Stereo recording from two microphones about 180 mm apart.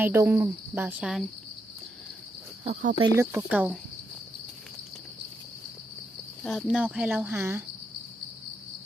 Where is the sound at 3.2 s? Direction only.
15° right (ahead or behind).